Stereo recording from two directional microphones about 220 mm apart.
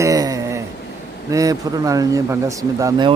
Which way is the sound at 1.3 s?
15° right (ahead or behind).